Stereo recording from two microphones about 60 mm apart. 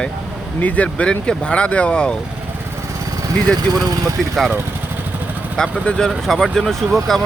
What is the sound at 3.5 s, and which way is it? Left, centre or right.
Speech, right.